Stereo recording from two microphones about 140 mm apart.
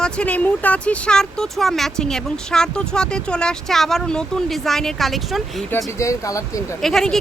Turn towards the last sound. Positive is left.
turn(degrees=5)  # may be behind; listen again after turning